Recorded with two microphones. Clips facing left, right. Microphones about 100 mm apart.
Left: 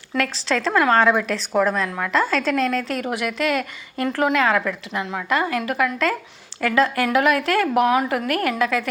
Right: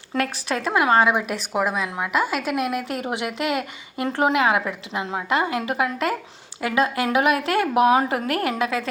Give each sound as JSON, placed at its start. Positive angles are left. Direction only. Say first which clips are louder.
{"t": 0.2, "sound": "speech", "louder": "left 2 dB", "side_deg": -20}